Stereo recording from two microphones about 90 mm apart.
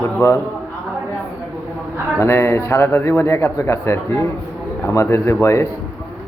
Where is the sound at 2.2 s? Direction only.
30° left (ahead or behind).